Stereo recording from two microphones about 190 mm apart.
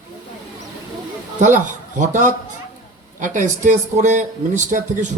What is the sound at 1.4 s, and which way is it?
Speech, 40° right (ahead or behind).